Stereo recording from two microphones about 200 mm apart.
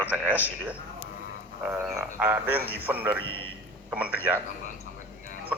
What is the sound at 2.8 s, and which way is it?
Speech, 10° right (ahead or behind).